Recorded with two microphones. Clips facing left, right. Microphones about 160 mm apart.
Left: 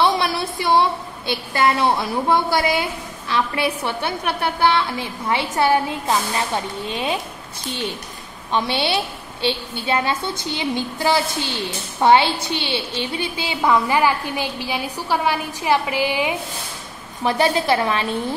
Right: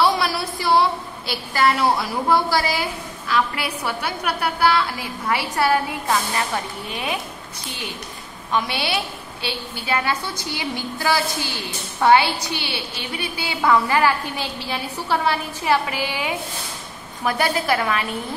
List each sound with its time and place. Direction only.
0.0 s a woman's voice: 25° left (ahead or behind)
8.5 s a woman's voice: 25° left (ahead or behind)